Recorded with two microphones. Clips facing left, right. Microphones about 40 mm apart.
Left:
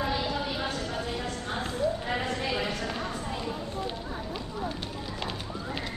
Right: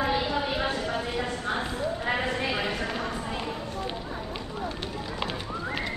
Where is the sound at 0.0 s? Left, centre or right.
Centre.